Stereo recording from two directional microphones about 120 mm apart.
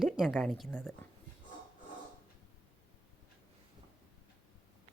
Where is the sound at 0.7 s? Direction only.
15° left (ahead or behind).